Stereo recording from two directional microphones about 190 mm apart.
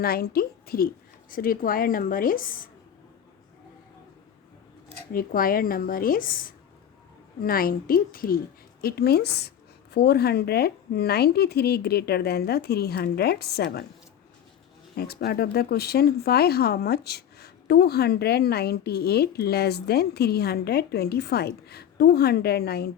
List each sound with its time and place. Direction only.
0.0 s a woman's voice: 50° left (ahead or behind)
5.1 s a woman's voice: 50° left (ahead or behind)
14.9 s speech: 55° left (ahead or behind)